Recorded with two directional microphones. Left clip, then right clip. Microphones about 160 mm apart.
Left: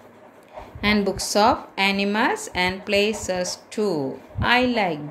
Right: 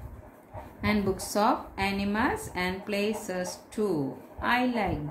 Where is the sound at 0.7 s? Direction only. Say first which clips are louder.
Left 7 dB; 50° left (ahead or behind).